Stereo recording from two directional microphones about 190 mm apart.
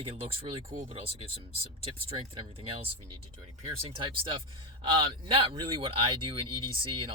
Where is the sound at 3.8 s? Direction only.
25° right (ahead or behind).